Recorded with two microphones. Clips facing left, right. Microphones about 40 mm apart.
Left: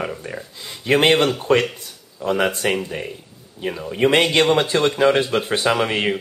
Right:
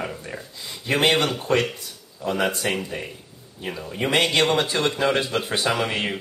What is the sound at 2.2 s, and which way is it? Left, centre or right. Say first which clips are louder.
Speech: left 4 dB; left.